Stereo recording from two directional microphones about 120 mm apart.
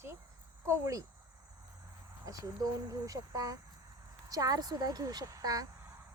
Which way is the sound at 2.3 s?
30° right (ahead or behind).